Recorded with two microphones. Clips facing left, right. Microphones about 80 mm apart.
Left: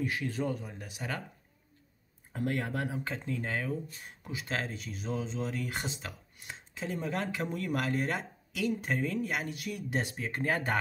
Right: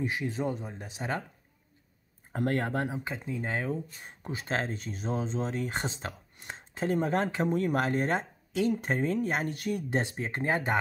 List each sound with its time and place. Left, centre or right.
0.0 s speech: right
2.3 s speech: right
3.0 s speech: centre